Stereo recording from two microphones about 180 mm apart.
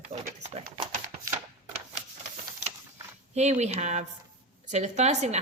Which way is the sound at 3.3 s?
40° right (ahead or behind).